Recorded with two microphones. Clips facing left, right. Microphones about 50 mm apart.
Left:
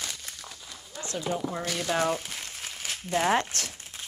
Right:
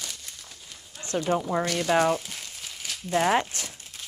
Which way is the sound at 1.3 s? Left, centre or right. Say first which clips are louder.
Right 5 dB; right.